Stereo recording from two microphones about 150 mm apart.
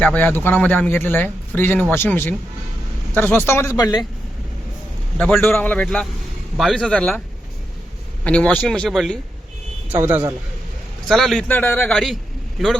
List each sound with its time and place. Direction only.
0.0 s speech: 10° left (ahead or behind)
5.1 s speech: 5° left (ahead or behind)
8.2 s speech: 10° left (ahead or behind)
9.9 s a man's voice: 15° right (ahead or behind)
11.1 s speech: centre (ahead or behind)